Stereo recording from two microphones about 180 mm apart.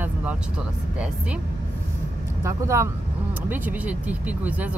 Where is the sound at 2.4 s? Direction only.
15° right (ahead or behind).